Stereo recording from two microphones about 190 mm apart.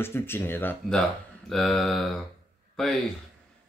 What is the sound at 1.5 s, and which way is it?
Mantra, centre (ahead or behind).